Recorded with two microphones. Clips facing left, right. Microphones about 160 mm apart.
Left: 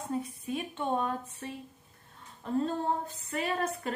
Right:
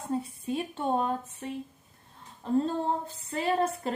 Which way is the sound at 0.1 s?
30° right (ahead or behind).